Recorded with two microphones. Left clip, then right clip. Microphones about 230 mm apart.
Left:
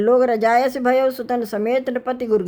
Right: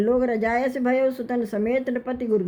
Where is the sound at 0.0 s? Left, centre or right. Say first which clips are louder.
Left 6 dB; left.